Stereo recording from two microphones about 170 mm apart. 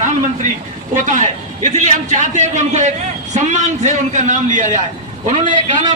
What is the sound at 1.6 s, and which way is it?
A man's voice, 45° right (ahead or behind).